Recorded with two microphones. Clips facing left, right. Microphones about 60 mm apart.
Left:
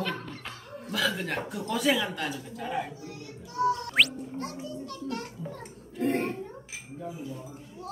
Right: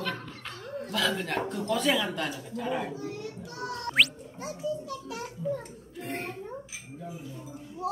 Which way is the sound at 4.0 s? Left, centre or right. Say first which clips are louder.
Even; centre.